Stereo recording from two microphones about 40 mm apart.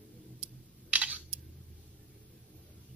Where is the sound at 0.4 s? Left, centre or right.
Right.